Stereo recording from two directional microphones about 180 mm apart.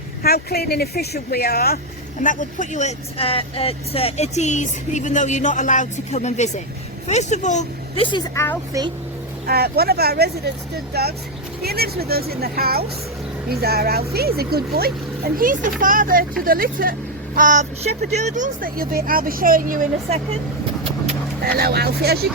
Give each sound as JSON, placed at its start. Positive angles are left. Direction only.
{"t": 0.2, "sound": "speech", "side_deg": 60}
{"t": 2.2, "sound": "speech", "side_deg": 45}
{"t": 8.4, "sound": "a child's voice", "side_deg": 15}
{"t": 9.5, "sound": "speech", "side_deg": -60}
{"t": 21.6, "sound": "speech", "side_deg": -60}